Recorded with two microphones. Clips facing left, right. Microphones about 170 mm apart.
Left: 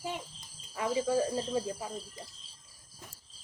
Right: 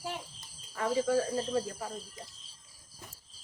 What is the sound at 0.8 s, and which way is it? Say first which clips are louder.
Speech: right 1 dB; 15° left (ahead or behind).